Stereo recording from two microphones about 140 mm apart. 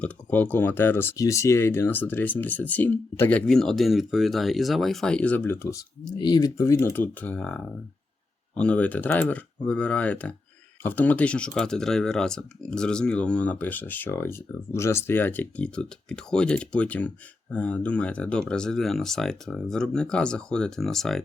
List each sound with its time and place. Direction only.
0.0 s speech: 10° left (ahead or behind)
6.1 s speech: 30° left (ahead or behind); by 21.2 s centre (ahead or behind)